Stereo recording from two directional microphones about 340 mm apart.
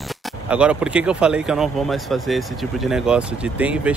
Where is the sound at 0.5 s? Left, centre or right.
Centre.